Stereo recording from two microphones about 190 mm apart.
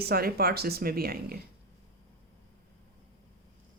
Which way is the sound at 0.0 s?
55° right (ahead or behind).